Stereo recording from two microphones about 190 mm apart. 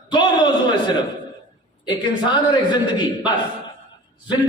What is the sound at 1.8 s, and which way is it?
A man's voice, 25° left (ahead or behind).